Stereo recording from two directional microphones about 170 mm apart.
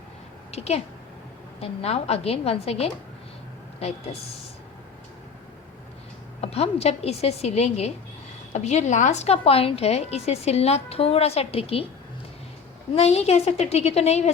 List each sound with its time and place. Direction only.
0.5 s a woman's voice: 40° left (ahead or behind)
6.4 s a woman's voice: 35° left (ahead or behind)
12.9 s a woman's voice: 35° left (ahead or behind)